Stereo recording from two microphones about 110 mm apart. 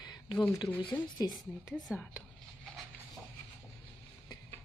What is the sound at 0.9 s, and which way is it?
Speech, 15° left (ahead or behind).